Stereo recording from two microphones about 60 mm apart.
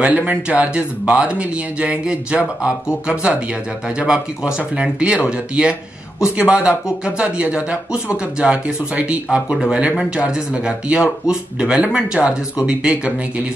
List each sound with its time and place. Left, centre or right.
0.0 s speech: right